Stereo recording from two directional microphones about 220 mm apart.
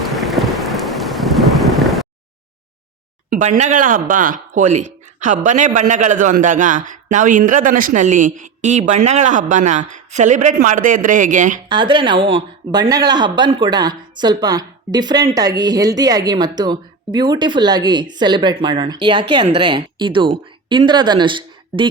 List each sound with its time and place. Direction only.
0.0 s thunder: centre (ahead or behind)
3.2 s speech: 40° right (ahead or behind)
11.7 s speech: 20° right (ahead or behind)